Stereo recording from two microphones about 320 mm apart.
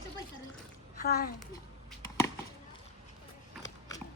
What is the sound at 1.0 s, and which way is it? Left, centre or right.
Speech, left.